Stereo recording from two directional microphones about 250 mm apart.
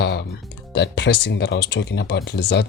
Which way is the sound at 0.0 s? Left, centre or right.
Left.